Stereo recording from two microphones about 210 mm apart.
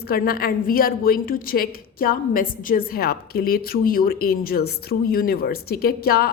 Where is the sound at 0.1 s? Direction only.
45° left (ahead or behind).